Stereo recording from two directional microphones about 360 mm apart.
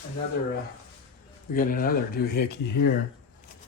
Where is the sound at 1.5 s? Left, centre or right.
Left.